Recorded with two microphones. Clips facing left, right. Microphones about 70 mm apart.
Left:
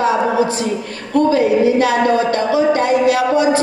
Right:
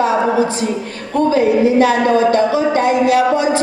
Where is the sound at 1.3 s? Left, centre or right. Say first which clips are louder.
Right 3 dB; right.